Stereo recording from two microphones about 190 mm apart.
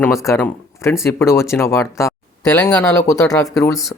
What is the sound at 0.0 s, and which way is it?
Speech, 15° left (ahead or behind).